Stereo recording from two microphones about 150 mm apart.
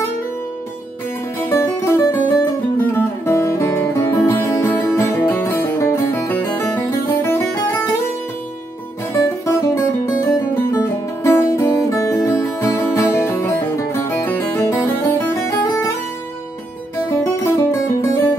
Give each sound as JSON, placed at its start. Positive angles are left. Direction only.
{"t": 1.4, "sound": "music", "side_deg": 15}
{"t": 9.1, "sound": "music", "side_deg": 20}
{"t": 17.1, "sound": "music", "side_deg": 20}